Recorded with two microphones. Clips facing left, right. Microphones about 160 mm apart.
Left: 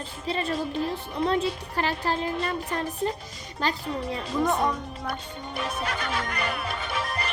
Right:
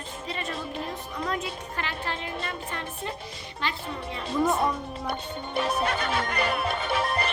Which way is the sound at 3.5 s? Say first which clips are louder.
Left 5 dB; 40° left (ahead or behind).